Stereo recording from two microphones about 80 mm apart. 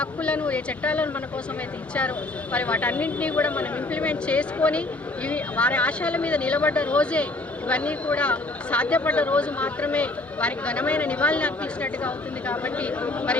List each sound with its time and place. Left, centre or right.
0.0 s speech: centre